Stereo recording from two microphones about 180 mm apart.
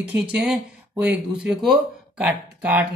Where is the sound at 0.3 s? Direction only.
5° right (ahead or behind).